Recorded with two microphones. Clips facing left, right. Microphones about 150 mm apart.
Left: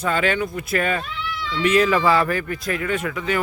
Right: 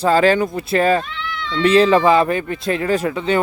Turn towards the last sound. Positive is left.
turn(degrees=-30)  # may be behind; listen again after turning